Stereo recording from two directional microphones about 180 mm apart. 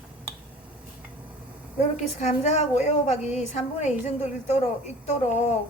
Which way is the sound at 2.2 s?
40° left (ahead or behind).